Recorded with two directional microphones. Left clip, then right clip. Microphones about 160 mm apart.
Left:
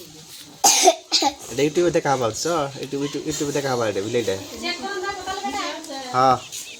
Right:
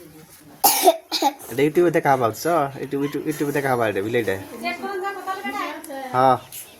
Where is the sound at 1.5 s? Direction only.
15° right (ahead or behind).